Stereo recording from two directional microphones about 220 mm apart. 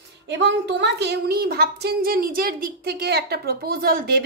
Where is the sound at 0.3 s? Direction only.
50° right (ahead or behind).